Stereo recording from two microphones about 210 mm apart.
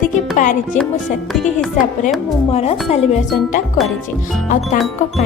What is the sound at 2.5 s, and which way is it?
Speech, 30° left (ahead or behind).